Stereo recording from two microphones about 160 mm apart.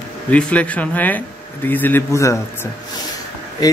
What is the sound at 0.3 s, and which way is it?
A man's voice, 10° left (ahead or behind).